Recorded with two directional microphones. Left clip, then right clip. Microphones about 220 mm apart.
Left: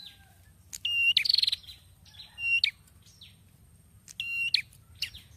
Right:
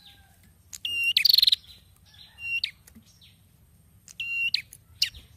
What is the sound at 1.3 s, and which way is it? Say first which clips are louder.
Chirp: right 6 dB; 45° right (ahead or behind).